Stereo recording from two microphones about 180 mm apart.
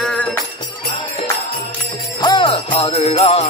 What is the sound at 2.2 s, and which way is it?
Jingle bell, 25° left (ahead or behind).